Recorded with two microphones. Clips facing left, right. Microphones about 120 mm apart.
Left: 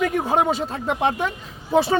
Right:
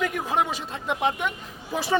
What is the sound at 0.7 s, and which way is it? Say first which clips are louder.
A man's voice: left 4 dB; 40° left (ahead or behind).